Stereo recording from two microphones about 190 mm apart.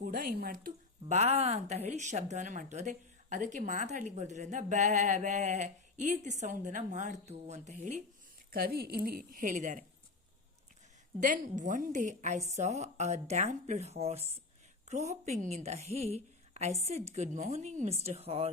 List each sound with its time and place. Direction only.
0.0 s a woman's voice: 50° right (ahead or behind)
8.5 s a woman's voice: 55° right (ahead or behind)
11.2 s a woman's voice: 40° right (ahead or behind)